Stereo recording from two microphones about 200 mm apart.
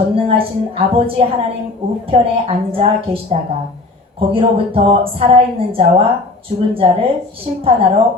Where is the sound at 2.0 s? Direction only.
25° right (ahead or behind).